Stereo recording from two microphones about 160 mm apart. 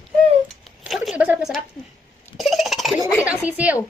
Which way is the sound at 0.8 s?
Centre (ahead or behind).